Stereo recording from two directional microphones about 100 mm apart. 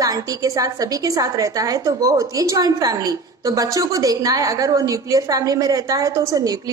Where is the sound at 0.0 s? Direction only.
35° right (ahead or behind).